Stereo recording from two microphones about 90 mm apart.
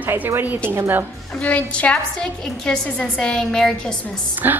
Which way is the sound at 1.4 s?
15° left (ahead or behind).